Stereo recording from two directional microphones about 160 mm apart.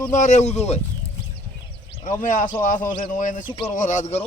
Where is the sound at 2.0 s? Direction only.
55° left (ahead or behind).